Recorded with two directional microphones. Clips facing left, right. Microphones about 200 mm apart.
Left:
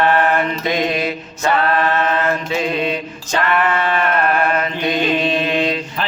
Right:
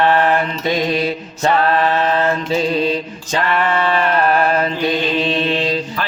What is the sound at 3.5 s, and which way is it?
Chant, 30° right (ahead or behind).